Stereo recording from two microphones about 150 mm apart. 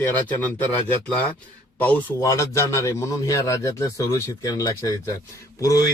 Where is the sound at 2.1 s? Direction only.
20° left (ahead or behind).